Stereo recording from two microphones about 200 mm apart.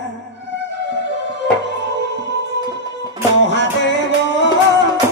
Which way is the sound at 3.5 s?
60° left (ahead or behind).